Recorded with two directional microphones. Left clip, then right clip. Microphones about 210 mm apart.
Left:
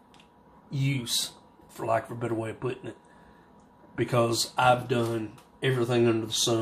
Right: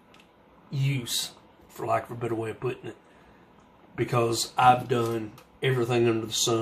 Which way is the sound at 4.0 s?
15° left (ahead or behind).